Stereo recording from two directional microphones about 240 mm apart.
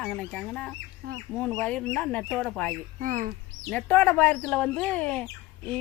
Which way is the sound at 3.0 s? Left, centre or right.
Right.